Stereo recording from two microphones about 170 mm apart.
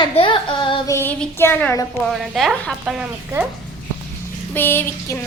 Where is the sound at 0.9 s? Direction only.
10° left (ahead or behind).